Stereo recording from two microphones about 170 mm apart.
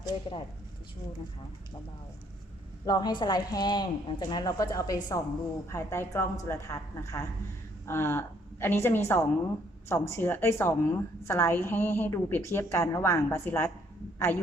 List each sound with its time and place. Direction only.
0.0 s speech: 25° left (ahead or behind)
2.8 s a woman's voice: 25° left (ahead or behind); by 14.4 s 10° left (ahead or behind)